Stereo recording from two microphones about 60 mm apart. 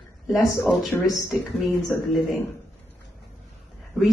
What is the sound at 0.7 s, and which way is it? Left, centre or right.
Speech, centre.